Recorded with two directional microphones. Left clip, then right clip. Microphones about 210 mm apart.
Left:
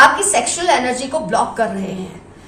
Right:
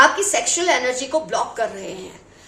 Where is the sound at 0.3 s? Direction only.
45° right (ahead or behind).